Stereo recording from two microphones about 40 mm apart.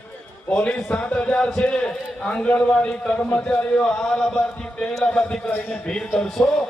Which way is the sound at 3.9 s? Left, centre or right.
Centre.